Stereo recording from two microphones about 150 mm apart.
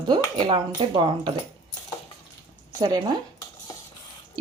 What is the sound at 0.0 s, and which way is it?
Speech, 30° right (ahead or behind).